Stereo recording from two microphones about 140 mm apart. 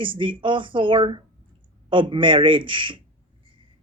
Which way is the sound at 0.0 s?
35° right (ahead or behind).